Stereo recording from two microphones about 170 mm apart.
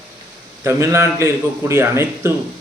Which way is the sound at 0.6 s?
15° right (ahead or behind).